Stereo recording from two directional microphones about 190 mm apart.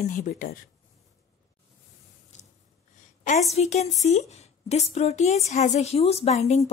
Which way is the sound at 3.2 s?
40° left (ahead or behind).